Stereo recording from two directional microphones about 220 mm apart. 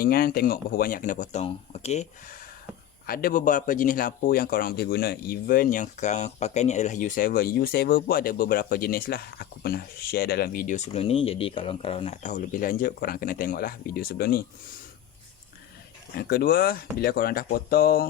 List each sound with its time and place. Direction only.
0.0 s speech: 40° left (ahead or behind)
3.1 s speech: 40° left (ahead or behind)
16.1 s speech: 45° left (ahead or behind)